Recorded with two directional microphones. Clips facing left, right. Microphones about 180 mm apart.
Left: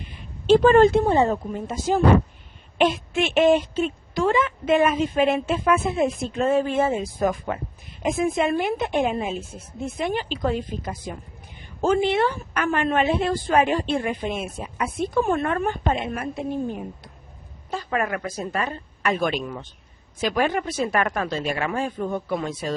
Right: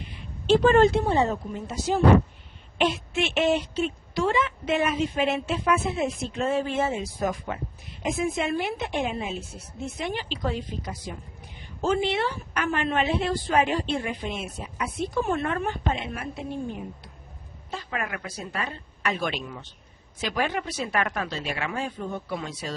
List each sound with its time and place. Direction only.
0.1 s a woman's voice: 50° left (ahead or behind)